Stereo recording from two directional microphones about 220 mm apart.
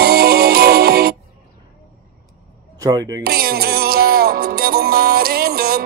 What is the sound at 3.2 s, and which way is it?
Music, 45° right (ahead or behind).